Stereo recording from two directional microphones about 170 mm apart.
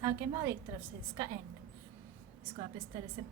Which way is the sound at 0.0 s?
15° right (ahead or behind).